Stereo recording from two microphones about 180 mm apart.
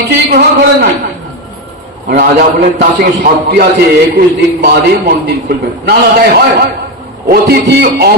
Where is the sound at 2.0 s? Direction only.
55° right (ahead or behind).